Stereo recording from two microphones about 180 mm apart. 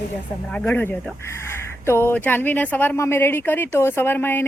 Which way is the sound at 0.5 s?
10° left (ahead or behind).